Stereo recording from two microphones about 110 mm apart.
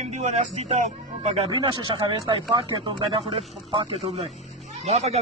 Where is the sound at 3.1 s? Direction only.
70° right (ahead or behind).